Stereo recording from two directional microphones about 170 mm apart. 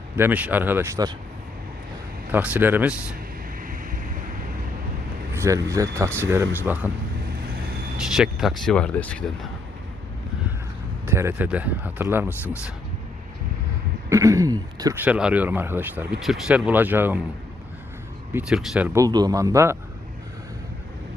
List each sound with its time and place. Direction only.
0.2 s speech: 10° right (ahead or behind)
2.3 s speech: 10° right (ahead or behind)
3.7 s vehicle: 50° right (ahead or behind)
5.3 s speech: 15° right (ahead or behind)
7.9 s speech: 5° right (ahead or behind)
11.0 s speech: 15° right (ahead or behind)
14.1 s a sound: 20° right (ahead or behind)
15.0 s speech: 5° right (ahead or behind)
18.3 s speech: 5° right (ahead or behind)
18.9 s speech: 20° right (ahead or behind)